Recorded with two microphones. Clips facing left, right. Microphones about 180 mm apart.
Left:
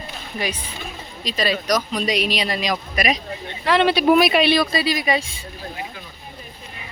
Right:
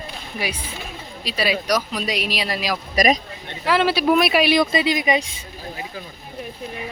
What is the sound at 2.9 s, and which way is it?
Speech, 45° right (ahead or behind).